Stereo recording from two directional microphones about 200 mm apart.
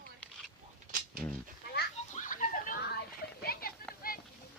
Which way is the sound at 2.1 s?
40° left (ahead or behind).